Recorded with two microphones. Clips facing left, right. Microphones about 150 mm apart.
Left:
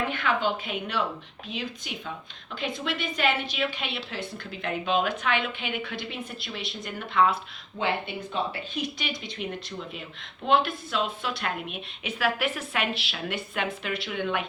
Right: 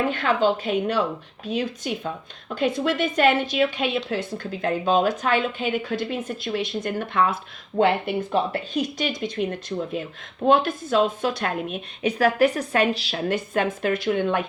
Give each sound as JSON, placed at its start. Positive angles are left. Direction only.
{"t": 0.1, "sound": "a woman's voice", "side_deg": -40}